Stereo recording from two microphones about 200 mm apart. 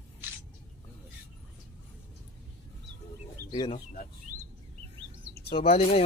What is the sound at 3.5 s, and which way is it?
Speech, 20° left (ahead or behind).